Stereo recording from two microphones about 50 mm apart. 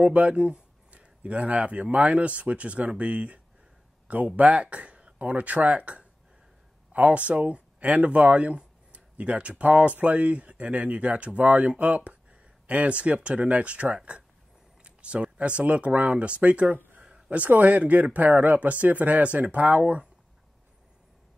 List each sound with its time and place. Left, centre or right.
0.0 s speech: right
4.4 s speech: right
14.8 s a sound: right
15.3 s speech: right